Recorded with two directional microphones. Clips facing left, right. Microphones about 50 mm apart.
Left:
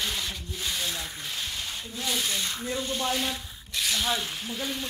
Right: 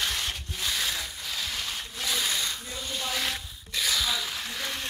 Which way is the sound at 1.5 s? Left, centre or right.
Right.